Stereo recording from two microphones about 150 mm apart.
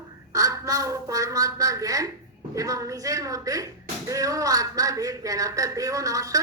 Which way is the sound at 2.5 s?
20° right (ahead or behind).